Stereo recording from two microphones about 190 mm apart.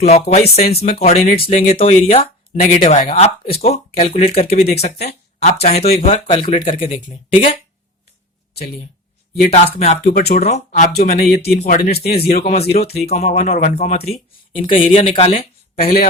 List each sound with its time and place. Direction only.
0.0 s speech: 35° left (ahead or behind)
9.5 s speech: 35° left (ahead or behind)
11.4 s speech: 55° left (ahead or behind)
12.4 s speech: 35° left (ahead or behind)
15.7 s speech: 50° left (ahead or behind)